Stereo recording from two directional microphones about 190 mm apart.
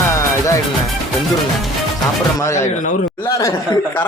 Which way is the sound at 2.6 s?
40° left (ahead or behind).